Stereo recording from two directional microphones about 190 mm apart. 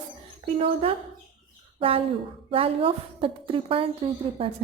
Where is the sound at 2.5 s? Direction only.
30° right (ahead or behind).